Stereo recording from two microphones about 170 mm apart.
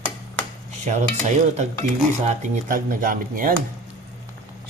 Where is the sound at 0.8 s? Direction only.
45° right (ahead or behind).